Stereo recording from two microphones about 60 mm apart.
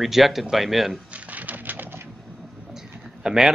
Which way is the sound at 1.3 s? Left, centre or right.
Right.